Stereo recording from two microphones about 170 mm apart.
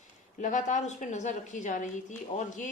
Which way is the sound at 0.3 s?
45° left (ahead or behind).